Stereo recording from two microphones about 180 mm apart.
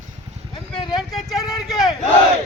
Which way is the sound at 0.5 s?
25° left (ahead or behind).